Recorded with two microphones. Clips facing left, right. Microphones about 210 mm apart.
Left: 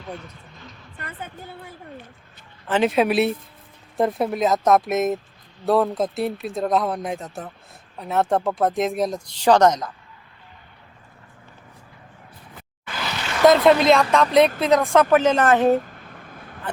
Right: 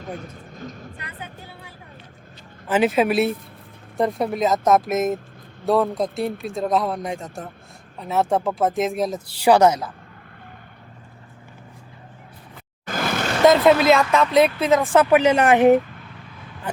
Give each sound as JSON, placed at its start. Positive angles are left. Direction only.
{"t": 0.0, "sound": "speech", "side_deg": -45}
{"t": 0.9, "sound": "a woman's voice", "side_deg": 50}
{"t": 2.6, "sound": "speech", "side_deg": -5}
{"t": 12.8, "sound": "vehicle", "side_deg": -45}
{"t": 13.4, "sound": "speech", "side_deg": 0}
{"t": 15.1, "sound": "a woman's voice", "side_deg": -10}
{"t": 15.8, "sound": "a sound", "side_deg": 45}